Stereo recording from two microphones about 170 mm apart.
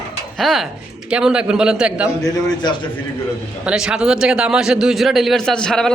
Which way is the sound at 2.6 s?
25° left (ahead or behind).